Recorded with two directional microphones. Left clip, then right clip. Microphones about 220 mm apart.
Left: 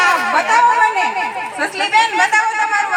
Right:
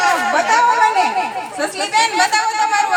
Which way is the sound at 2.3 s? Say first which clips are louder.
Left 1 dB; 40° right (ahead or behind).